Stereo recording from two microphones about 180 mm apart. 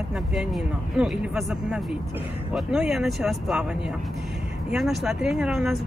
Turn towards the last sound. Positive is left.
turn(degrees=0)  # may be behind; listen again after turning